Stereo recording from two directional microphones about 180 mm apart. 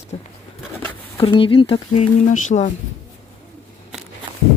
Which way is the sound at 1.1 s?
30° left (ahead or behind).